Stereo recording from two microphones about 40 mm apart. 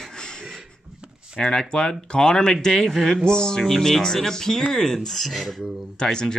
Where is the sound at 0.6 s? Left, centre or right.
Right.